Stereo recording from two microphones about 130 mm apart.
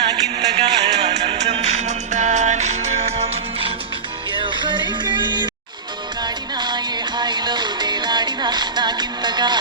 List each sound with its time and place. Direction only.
0.0 s music: 50° right (ahead or behind)
4.3 s music: 40° right (ahead or behind)